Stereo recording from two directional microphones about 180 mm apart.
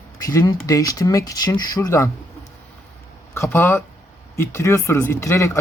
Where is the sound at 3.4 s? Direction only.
15° left (ahead or behind).